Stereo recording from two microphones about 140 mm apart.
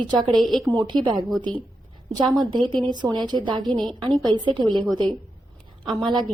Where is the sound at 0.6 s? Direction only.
25° right (ahead or behind).